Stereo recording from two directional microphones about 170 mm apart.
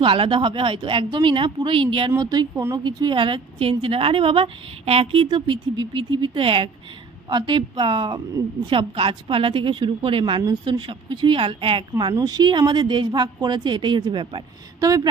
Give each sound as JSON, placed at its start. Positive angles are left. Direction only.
{"t": 0.0, "sound": "a woman's voice", "side_deg": -30}